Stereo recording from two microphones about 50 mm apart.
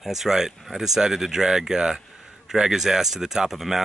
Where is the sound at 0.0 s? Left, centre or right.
Centre.